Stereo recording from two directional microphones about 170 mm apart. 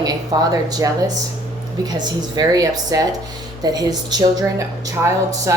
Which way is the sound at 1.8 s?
25° right (ahead or behind).